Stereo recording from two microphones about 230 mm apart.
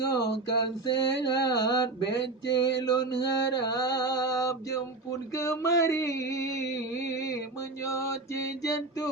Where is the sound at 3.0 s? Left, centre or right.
Centre.